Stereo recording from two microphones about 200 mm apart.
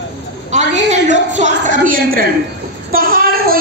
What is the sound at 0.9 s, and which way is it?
A woman's voice, 35° right (ahead or behind).